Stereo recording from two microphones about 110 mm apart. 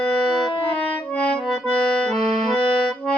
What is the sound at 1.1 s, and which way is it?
Accordion, 10° left (ahead or behind).